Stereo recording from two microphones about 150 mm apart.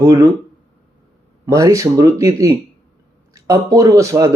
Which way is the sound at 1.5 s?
20° right (ahead or behind).